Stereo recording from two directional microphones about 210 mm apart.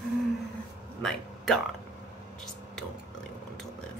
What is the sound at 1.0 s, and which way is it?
Speech, centre (ahead or behind).